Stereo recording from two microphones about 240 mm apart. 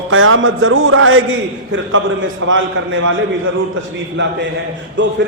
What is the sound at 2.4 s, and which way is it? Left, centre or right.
Speech, right.